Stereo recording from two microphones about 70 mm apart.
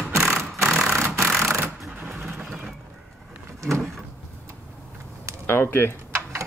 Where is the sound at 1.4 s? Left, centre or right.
Right.